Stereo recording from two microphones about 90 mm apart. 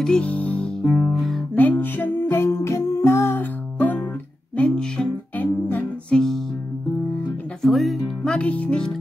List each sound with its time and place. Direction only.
0.0 s music: 10° left (ahead or behind)
0.8 s music: centre (ahead or behind)
1.5 s music: 20° left (ahead or behind)
7.6 s music: centre (ahead or behind)
8.2 s music: 10° left (ahead or behind)